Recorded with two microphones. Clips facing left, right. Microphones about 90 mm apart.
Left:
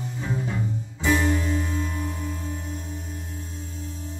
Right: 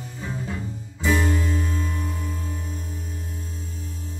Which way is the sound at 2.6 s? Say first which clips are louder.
Left 1 dB; 30° left (ahead or behind).